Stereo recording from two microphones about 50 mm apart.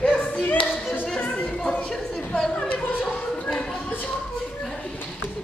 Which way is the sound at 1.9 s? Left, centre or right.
Centre.